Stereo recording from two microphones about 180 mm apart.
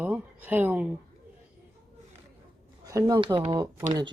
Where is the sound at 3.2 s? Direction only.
30° right (ahead or behind).